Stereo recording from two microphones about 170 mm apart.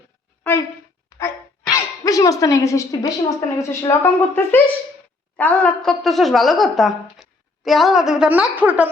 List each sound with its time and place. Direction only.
1.1 s music: 20° left (ahead or behind)
1.7 s a woman's voice: 20° left (ahead or behind); by 8.9 s 10° right (ahead or behind)